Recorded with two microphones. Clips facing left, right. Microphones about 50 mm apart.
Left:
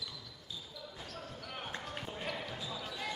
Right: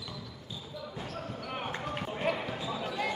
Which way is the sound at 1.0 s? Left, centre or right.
Right.